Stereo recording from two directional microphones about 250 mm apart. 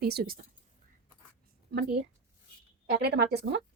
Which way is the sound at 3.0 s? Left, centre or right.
Right.